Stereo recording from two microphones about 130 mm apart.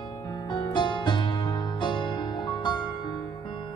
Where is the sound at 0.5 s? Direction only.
35° left (ahead or behind).